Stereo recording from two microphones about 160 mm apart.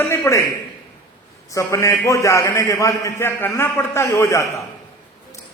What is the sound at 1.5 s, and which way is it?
A man's voice, 20° left (ahead or behind).